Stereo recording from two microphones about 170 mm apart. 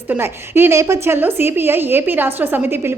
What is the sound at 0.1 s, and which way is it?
A woman's voice, 15° right (ahead or behind).